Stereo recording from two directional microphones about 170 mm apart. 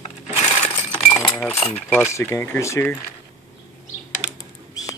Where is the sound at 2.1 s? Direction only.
15° left (ahead or behind).